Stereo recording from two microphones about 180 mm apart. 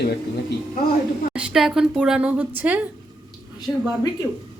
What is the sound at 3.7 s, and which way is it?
Speech, 15° left (ahead or behind).